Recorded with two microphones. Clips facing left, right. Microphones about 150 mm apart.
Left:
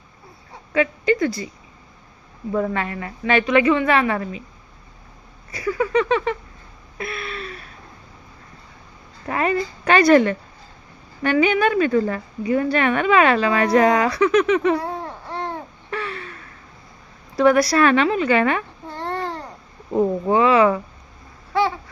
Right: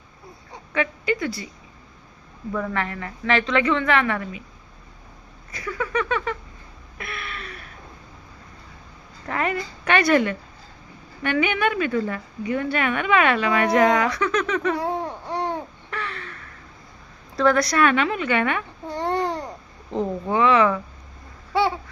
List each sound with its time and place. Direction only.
0.7 s a woman's voice: 35° left (ahead or behind)
2.5 s a woman's voice: 30° left (ahead or behind)
5.5 s a woman's voice: 25° left (ahead or behind)
7.0 s a sound: 25° left (ahead or behind)
9.3 s a woman's voice: 25° left (ahead or behind)
14.8 s babbling: 20° right (ahead or behind)
15.9 s gasp: 20° left (ahead or behind)
17.6 s a woman's voice: 30° left (ahead or behind)
18.9 s babbling: 15° right (ahead or behind)
20.3 s a woman's voice: 25° left (ahead or behind)